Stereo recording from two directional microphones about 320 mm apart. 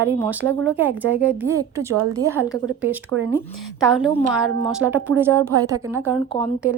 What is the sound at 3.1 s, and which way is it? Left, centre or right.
Speech, right.